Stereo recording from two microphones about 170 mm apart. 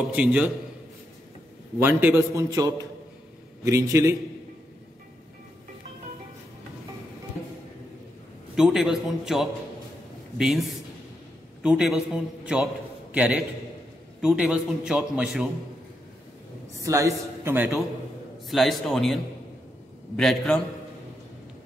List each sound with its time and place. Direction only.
0.1 s a man's voice: 5° right (ahead or behind)
1.8 s a man's voice: 10° right (ahead or behind)
8.5 s a man's voice: 5° right (ahead or behind)
11.6 s a man's voice: 5° right (ahead or behind)
16.8 s a man's voice: 20° right (ahead or behind)
18.5 s a man's voice: centre (ahead or behind)
20.2 s a man's voice: 5° left (ahead or behind)